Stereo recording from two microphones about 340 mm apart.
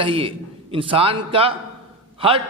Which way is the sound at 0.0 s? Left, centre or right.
Centre.